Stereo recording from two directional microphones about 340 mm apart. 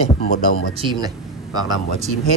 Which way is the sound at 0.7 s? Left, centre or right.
Centre.